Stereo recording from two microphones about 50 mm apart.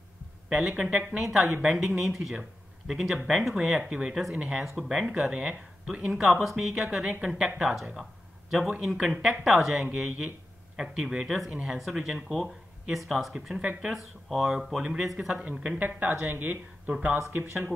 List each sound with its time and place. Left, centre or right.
0.8 s speech: centre
7.9 s a sound: centre
8.6 s speech: centre
9.4 s speech: centre
9.8 s speech: centre
11.5 s speech: centre
15.8 s speech: right